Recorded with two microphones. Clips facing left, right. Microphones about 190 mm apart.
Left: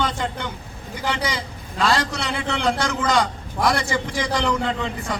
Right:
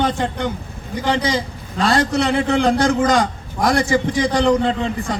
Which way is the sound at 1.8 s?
50° right (ahead or behind).